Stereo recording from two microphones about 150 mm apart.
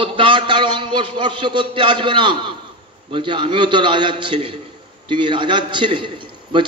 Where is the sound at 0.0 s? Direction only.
35° right (ahead or behind).